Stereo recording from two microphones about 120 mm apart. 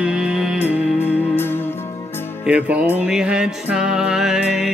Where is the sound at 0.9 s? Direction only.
20° left (ahead or behind).